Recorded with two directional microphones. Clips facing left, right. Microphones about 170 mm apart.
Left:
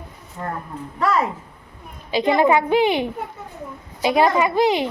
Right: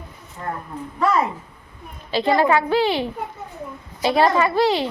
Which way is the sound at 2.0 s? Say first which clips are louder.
Left 1 dB; 15° left (ahead or behind).